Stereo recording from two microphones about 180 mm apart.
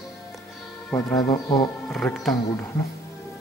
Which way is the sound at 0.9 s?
20° left (ahead or behind).